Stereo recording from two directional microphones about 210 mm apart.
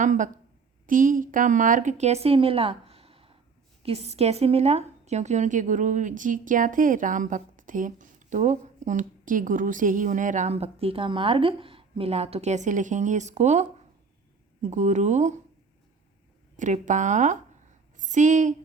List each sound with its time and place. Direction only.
0.0 s a woman's voice: 35° right (ahead or behind)
16.6 s a woman's voice: 35° right (ahead or behind)